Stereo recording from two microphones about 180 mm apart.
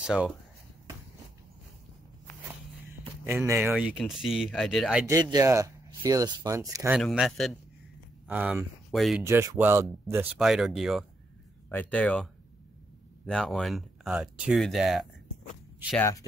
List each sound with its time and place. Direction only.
0.0 s speech: 5° right (ahead or behind)
3.7 s speech: 5° right (ahead or behind)
5.0 s speech: 20° right (ahead or behind)
7.0 s speech: centre (ahead or behind)
9.2 s speech: 15° right (ahead or behind)
10.4 s speech: centre (ahead or behind)
13.3 s speech: 5° left (ahead or behind)
16.0 s speech: 15° left (ahead or behind)